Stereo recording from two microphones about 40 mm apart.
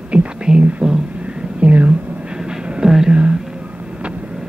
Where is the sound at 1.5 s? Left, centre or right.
Right.